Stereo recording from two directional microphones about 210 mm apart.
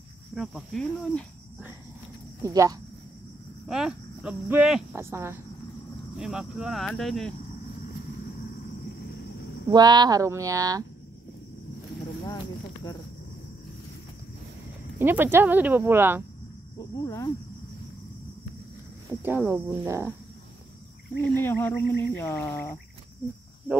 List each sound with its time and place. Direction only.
0.3 s speech: centre (ahead or behind)
2.4 s speech: 15° right (ahead or behind)
3.6 s speech: centre (ahead or behind)
9.7 s speech: 20° right (ahead or behind)
12.8 s speech: 15° left (ahead or behind)
15.0 s speech: 10° right (ahead or behind)
16.7 s speech: 20° left (ahead or behind)
19.2 s speech: 10° right (ahead or behind)
21.2 s speech: 10° left (ahead or behind)